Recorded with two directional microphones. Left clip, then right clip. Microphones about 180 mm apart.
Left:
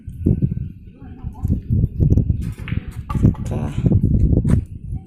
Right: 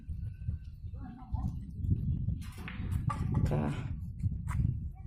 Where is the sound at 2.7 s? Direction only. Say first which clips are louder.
Left 13 dB; 30° right (ahead or behind).